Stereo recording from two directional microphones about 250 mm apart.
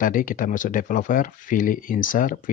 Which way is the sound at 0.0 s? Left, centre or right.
Left.